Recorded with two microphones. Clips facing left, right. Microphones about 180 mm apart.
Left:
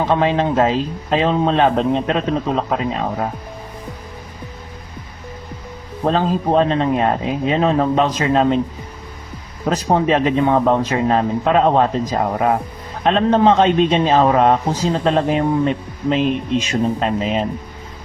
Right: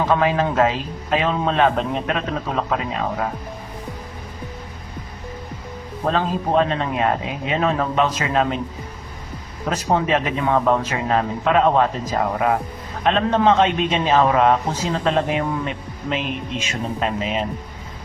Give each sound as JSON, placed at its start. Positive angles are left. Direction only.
{"t": 0.1, "sound": "a man's voice", "side_deg": 25}
{"t": 6.1, "sound": "a man's voice", "side_deg": 30}
{"t": 9.6, "sound": "a man's voice", "side_deg": 35}